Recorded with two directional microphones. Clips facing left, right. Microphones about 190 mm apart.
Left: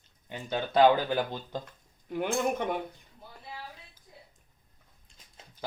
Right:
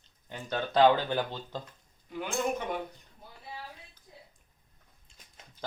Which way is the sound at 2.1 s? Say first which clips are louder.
Left 3 dB; 55° left (ahead or behind).